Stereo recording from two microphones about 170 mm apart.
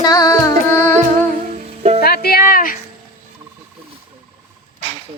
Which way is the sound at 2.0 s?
65° left (ahead or behind).